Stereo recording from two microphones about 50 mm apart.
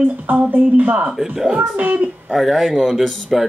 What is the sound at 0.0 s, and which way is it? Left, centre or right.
A woman's voice, right.